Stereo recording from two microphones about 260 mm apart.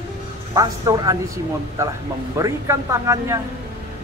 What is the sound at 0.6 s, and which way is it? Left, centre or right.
A man's voice, centre.